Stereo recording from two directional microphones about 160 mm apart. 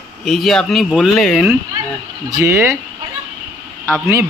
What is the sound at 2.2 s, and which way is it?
Speech, 20° right (ahead or behind).